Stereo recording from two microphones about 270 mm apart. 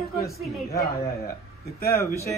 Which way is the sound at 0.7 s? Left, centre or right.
Left.